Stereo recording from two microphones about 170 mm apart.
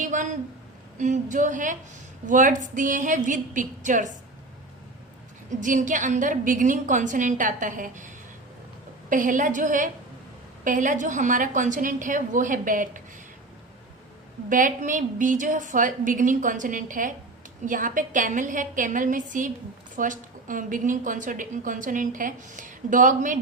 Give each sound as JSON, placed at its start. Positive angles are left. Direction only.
{"t": 0.0, "sound": "a sound", "side_deg": -50}
{"t": 0.9, "sound": "a woman's voice", "side_deg": -45}
{"t": 5.5, "sound": "a woman's voice", "side_deg": -50}
{"t": 14.5, "sound": "a woman's voice", "side_deg": -50}